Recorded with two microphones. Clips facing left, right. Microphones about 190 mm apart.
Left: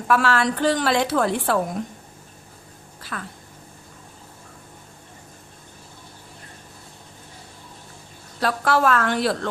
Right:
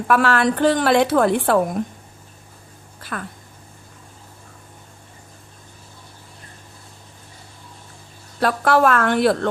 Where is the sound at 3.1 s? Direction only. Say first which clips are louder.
Right 4 dB; 45° right (ahead or behind).